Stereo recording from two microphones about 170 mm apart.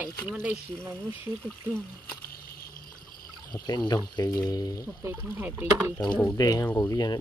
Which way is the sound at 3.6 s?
25° left (ahead or behind).